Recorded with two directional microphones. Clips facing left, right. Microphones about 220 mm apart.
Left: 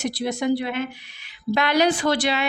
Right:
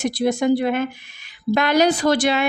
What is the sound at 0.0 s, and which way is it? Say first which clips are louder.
Speech: right 5 dB; 50° right (ahead or behind).